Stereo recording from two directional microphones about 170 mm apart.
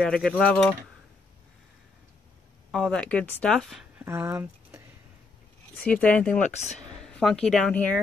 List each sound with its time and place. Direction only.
0.0 s speech: 5° left (ahead or behind)
2.7 s speech: 5° left (ahead or behind)
4.0 s a sound: 15° right (ahead or behind)
5.9 s speech: 10° left (ahead or behind)